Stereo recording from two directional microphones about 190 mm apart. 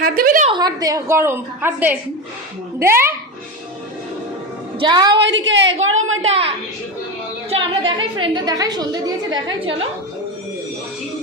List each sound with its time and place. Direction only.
0.0 s a sound: 50° right (ahead or behind)
0.5 s a woman's voice: 20° right (ahead or behind)
4.8 s a woman's voice: 20° right (ahead or behind)
5.2 s a woman's voice: 75° right (ahead or behind)
7.5 s a woman's voice: 25° right (ahead or behind)